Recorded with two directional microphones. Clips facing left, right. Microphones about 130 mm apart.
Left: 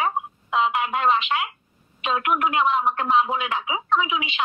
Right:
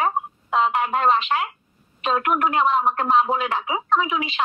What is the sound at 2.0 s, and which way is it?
Speech, 40° right (ahead or behind).